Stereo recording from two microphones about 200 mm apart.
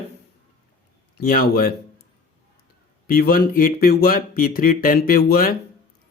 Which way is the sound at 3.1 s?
50° left (ahead or behind).